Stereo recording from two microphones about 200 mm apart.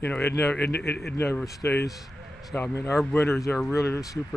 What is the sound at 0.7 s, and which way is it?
Speech, 55° left (ahead or behind).